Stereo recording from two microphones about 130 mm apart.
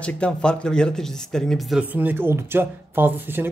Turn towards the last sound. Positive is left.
turn(degrees=-15)  # may be behind; listen again after turning